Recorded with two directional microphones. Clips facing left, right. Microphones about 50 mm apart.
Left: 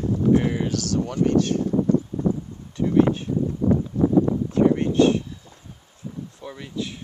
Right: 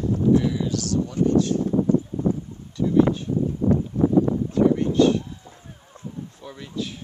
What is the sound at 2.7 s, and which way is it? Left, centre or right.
Speech, left.